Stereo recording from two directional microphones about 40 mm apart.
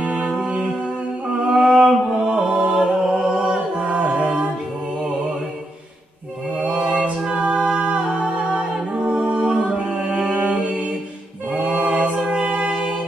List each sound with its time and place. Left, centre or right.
0.0 s music: right
1.5 s a sound: centre
2.2 s music: right
3.7 s a capella: right
6.6 s a capella: right
7.9 s humming: right
9.1 s music: centre
11.5 s a capella: right